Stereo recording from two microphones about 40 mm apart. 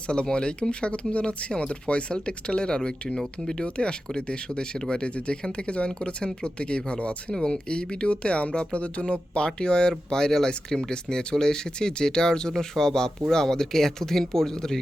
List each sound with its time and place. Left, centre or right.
0.3 s speech: left
3.6 s speech: left
7.3 s speech: left
9.5 s speech: left